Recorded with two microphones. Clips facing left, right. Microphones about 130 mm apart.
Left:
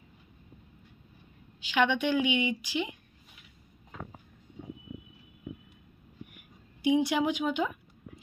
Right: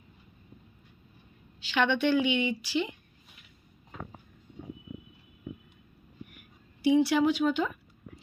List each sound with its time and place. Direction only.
1.6 s a woman's voice: 10° left (ahead or behind)
6.8 s a woman's voice: 15° left (ahead or behind)